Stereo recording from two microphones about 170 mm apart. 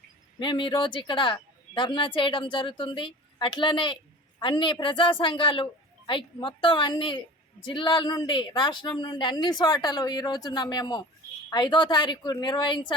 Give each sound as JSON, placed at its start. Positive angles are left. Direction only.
{"t": 0.3, "sound": "speech", "side_deg": 30}